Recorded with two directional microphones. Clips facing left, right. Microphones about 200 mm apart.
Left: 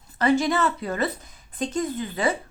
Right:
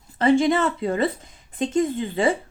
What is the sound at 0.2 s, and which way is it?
Speech, 25° right (ahead or behind).